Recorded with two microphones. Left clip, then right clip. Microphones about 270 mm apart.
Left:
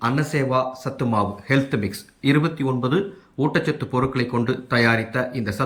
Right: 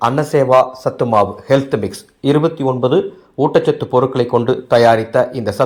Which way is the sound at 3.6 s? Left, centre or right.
Right.